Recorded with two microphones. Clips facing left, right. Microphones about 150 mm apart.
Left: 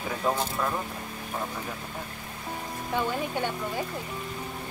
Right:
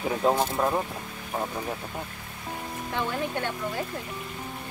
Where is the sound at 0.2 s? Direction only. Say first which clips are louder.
Right 4 dB; 25° right (ahead or behind).